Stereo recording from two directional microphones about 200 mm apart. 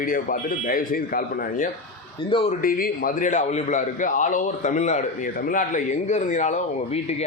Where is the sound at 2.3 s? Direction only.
25° left (ahead or behind).